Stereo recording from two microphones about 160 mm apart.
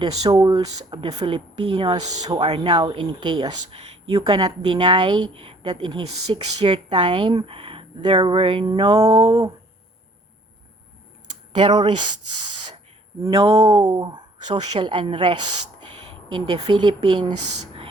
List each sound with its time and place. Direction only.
0.0 s speech: 25° right (ahead or behind)
6.6 s a sound: 30° right (ahead or behind)
7.0 s speech: 30° right (ahead or behind)
11.5 s speech: 30° right (ahead or behind)
13.3 s a sound: 40° right (ahead or behind)
13.7 s speech: 25° right (ahead or behind)